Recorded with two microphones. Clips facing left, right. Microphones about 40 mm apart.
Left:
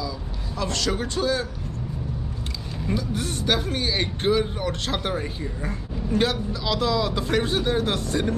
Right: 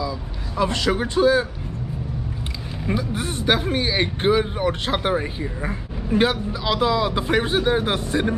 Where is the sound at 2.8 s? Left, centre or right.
Right.